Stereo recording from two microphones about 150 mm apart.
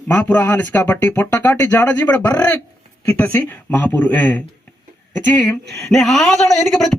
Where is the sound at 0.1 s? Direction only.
10° left (ahead or behind).